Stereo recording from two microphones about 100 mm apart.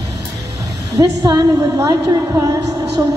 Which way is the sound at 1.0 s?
40° right (ahead or behind).